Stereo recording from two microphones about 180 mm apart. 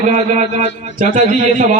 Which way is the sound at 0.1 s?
40° right (ahead or behind).